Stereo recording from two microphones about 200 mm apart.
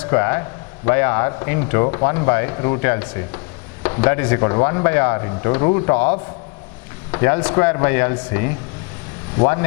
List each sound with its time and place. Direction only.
0.0 s a man's voice: 15° left (ahead or behind)